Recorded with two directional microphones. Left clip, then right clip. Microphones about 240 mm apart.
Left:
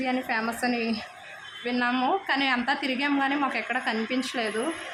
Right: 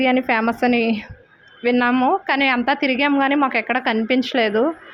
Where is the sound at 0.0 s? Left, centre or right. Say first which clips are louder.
Right 10 dB; right.